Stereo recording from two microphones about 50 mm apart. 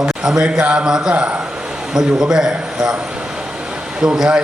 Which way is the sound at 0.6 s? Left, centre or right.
Right.